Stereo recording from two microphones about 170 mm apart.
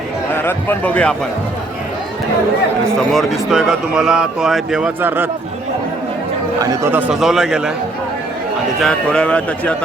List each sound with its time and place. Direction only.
0.3 s speech: 10° left (ahead or behind)
3.1 s speech: centre (ahead or behind)
6.6 s speech: 20° right (ahead or behind)
7.1 s speech: 5° right (ahead or behind)
8.8 s speech: 5° left (ahead or behind)